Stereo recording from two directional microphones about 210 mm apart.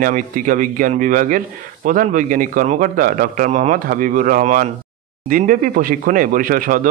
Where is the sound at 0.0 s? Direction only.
40° right (ahead or behind).